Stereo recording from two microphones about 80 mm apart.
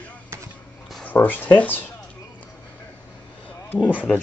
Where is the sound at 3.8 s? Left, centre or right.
Centre.